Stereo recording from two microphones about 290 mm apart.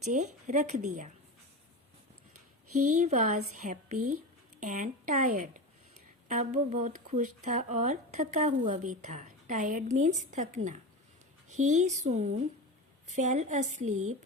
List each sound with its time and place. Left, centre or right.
0.0 s speech: right
2.3 s a sound: right
2.8 s speech: right
3.9 s speech: right
4.6 s speech: right
13.9 s speech: right